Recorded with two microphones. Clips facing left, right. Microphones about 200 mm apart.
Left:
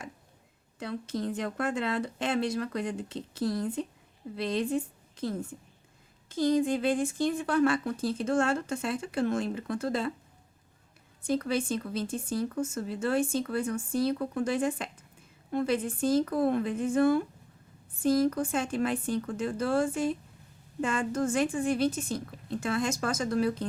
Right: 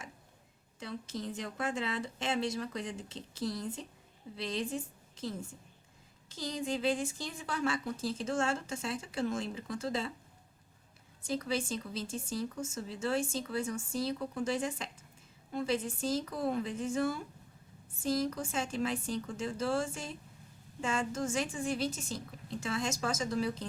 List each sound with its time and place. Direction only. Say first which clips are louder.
0.8 s a woman's voice: left 7 dB; 60° left (ahead or behind)
11.2 s a woman's voice: left 6 dB; 60° left (ahead or behind)